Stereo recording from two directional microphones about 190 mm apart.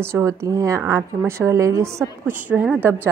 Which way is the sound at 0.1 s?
15° right (ahead or behind).